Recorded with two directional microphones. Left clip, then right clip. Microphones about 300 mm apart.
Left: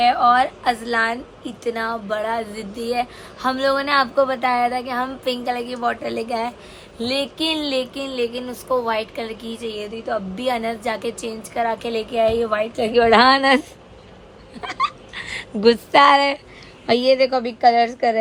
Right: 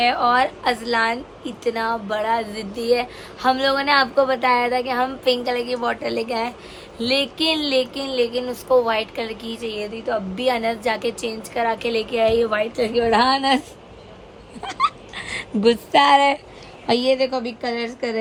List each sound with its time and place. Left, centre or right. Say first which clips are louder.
0.0 s a woman's voice: left 2 dB; centre
13.0 s a woman's voice: left 5 dB; centre
14.6 s a woman's voice: right 1 dB; centre